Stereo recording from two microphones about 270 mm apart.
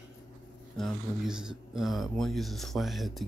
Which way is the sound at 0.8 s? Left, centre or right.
Centre.